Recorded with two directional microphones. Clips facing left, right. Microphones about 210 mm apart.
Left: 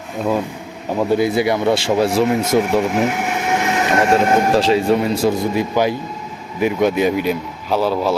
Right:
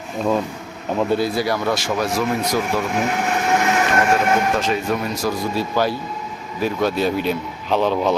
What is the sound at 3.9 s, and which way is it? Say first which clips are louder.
A man's voice: left 6 dB; 30° left (ahead or behind).